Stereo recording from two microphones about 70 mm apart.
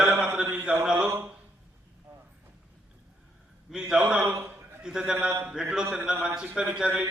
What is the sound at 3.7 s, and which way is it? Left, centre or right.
A man's voice, centre.